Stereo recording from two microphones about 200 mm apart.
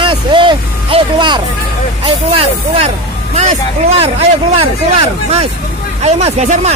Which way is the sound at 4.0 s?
30° right (ahead or behind).